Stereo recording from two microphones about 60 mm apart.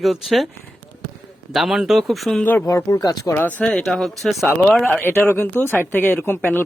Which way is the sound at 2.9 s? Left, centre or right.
Left.